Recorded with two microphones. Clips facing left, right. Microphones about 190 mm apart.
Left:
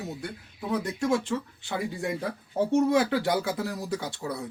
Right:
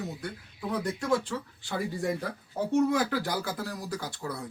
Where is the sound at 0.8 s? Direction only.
25° left (ahead or behind).